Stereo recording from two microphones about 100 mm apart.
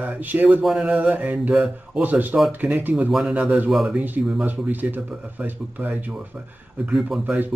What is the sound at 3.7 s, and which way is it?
Speech, centre (ahead or behind).